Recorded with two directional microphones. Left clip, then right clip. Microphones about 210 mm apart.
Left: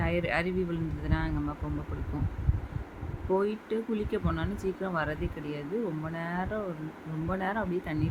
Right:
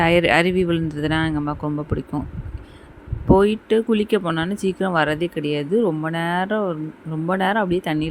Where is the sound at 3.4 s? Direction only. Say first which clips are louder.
Right 13 dB; 40° right (ahead or behind).